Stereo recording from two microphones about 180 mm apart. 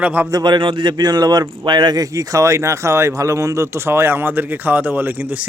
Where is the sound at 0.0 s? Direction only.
10° right (ahead or behind).